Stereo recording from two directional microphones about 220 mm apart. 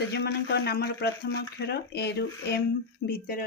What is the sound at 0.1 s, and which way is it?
Speech, 50° left (ahead or behind).